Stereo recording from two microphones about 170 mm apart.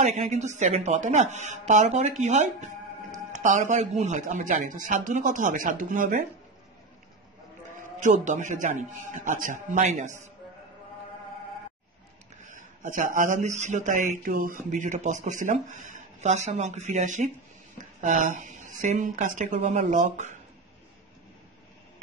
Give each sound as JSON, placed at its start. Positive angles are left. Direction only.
{"t": 0.0, "sound": "a man's voice", "side_deg": -45}
{"t": 7.8, "sound": "a man's voice", "side_deg": -45}
{"t": 12.4, "sound": "a man's voice", "side_deg": -45}